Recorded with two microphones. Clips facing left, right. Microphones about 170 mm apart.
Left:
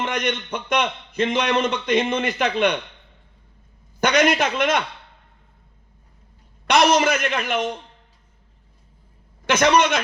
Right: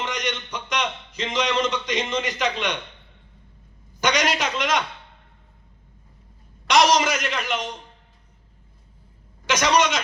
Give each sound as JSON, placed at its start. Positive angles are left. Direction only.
{"t": 0.0, "sound": "a man's voice", "side_deg": 55}
{"t": 4.0, "sound": "a man's voice", "side_deg": 55}
{"t": 6.7, "sound": "a man's voice", "side_deg": 55}
{"t": 9.5, "sound": "a man's voice", "side_deg": 55}